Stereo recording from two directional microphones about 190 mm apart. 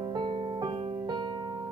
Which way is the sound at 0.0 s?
25° right (ahead or behind).